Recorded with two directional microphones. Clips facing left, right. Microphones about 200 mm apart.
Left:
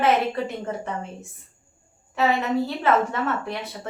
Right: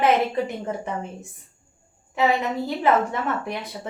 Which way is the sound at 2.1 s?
15° right (ahead or behind).